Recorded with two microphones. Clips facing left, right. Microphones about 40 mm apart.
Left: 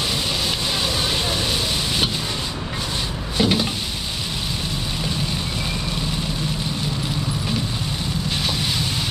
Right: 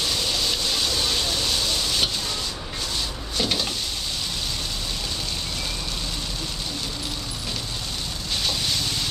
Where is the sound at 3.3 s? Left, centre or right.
Centre.